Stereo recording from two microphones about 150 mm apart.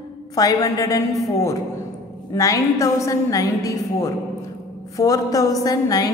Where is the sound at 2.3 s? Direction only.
20° left (ahead or behind).